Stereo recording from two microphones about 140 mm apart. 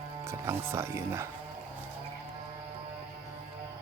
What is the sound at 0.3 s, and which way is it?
Speech, 20° right (ahead or behind).